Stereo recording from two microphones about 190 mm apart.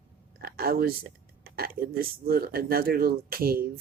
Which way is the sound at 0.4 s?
50° right (ahead or behind).